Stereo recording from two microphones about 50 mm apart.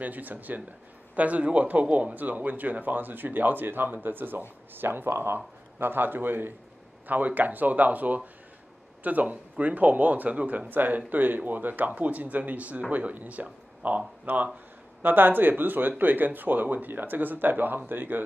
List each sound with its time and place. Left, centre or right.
0.0 s a man's voice: right
15.0 s speech: right